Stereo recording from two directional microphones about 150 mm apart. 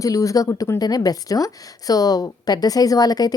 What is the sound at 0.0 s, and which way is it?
A woman's voice, 20° left (ahead or behind).